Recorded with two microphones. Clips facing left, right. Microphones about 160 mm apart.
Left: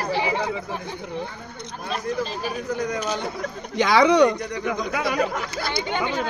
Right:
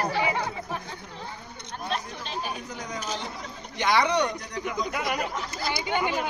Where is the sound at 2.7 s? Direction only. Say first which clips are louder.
Left 9 dB; 60° left (ahead or behind).